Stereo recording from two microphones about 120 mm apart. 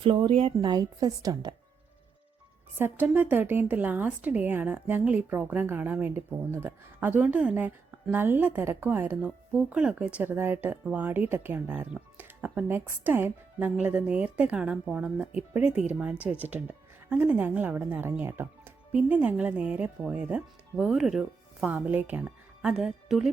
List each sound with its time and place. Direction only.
0.0 s a woman's voice: 45° right (ahead or behind)
2.7 s a woman's voice: 15° right (ahead or behind)
21.7 s speech: 15° right (ahead or behind)